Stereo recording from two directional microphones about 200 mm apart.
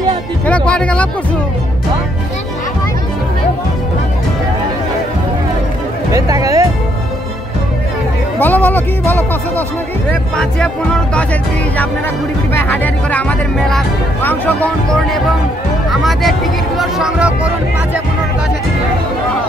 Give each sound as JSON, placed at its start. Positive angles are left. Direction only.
{"t": 0.5, "sound": "music", "side_deg": 5}
{"t": 6.1, "sound": "music", "side_deg": -15}
{"t": 8.4, "sound": "speech", "side_deg": 10}
{"t": 12.5, "sound": "speech", "side_deg": 10}